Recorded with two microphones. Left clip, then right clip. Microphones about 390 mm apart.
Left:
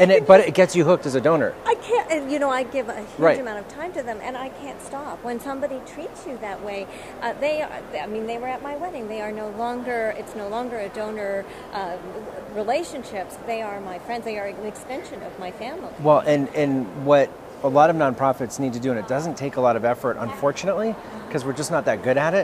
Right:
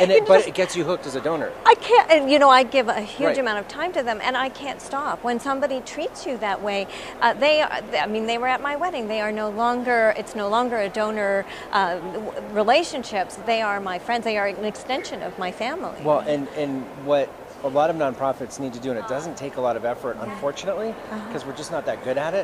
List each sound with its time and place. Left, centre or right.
0.0 s speech: left
1.6 s a woman's voice: right
16.1 s speech: left
21.4 s speech: left